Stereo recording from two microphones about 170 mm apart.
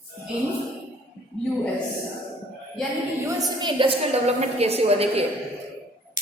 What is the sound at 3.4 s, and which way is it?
A woman's voice, 30° right (ahead or behind).